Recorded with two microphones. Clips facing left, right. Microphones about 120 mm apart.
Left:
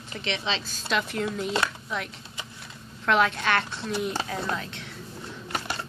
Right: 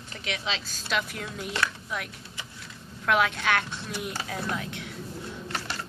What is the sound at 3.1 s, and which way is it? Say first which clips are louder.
Speech: left 1 dB; 10° right (ahead or behind).